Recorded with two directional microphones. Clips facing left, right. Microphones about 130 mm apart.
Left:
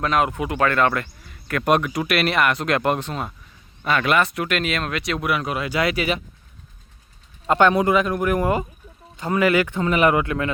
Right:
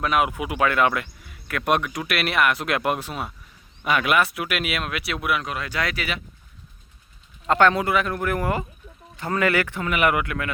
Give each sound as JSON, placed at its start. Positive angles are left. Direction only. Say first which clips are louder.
{"t": 0.0, "sound": "speech", "louder": "left 2 dB", "side_deg": -5}
{"t": 6.0, "sound": "speech", "louder": "left 7 dB", "side_deg": 20}
{"t": 7.4, "sound": "speech", "louder": "left 2 dB", "side_deg": 15}